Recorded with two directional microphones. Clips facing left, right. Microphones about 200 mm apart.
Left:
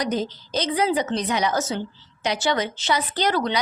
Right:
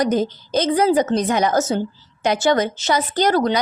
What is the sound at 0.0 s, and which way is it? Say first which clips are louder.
Speech: right 6 dB; 50° right (ahead or behind).